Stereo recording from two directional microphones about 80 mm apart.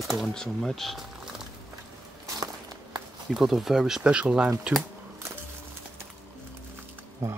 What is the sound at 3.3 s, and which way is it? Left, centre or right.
Speech, centre.